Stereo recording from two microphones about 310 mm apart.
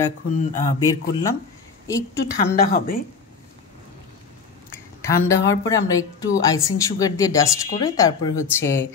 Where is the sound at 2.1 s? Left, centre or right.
Left.